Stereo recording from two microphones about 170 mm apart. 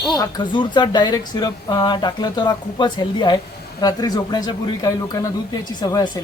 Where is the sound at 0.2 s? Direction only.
25° left (ahead or behind).